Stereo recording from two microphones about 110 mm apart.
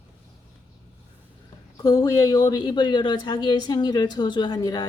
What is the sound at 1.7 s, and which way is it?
Speech, 35° left (ahead or behind).